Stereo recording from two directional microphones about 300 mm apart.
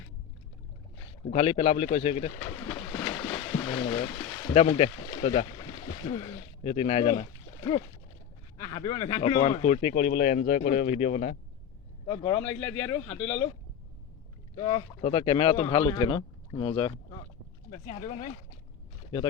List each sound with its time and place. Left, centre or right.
1.3 s pigeon: centre
5.2 s speech: left
14.5 s speech: centre